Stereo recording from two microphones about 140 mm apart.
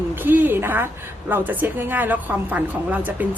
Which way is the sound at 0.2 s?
15° right (ahead or behind).